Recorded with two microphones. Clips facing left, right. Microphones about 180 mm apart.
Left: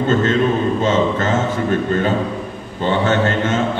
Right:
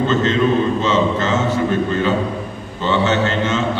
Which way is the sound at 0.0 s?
50° left (ahead or behind).